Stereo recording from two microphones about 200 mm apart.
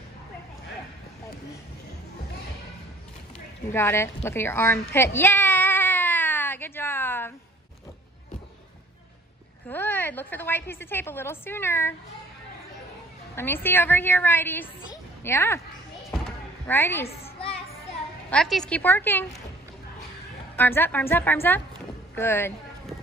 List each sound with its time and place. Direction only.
3.3 s a sound: 10° left (ahead or behind)
9.7 s a woman's voice: 10° left (ahead or behind)
13.4 s a woman's voice: 10° left (ahead or behind)
16.1 s basketball bounce: 5° left (ahead or behind)
17.1 s a sound: 30° left (ahead or behind)
18.3 s a woman's voice: centre (ahead or behind)
20.5 s a woman's voice: 10° left (ahead or behind)